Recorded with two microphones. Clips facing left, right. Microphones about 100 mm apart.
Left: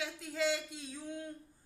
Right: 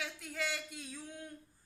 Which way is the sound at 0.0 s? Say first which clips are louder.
Left 5 dB; 20° left (ahead or behind).